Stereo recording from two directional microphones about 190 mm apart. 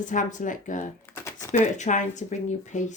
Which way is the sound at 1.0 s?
10° left (ahead or behind).